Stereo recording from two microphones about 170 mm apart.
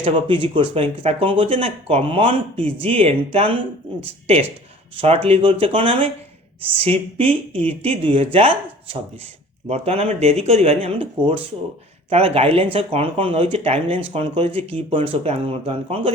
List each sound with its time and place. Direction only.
0.0 s speech: 30° right (ahead or behind)